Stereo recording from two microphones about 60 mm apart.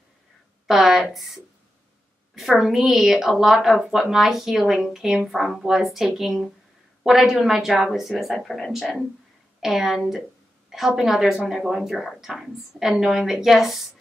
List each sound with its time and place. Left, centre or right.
0.7 s a woman's voice: centre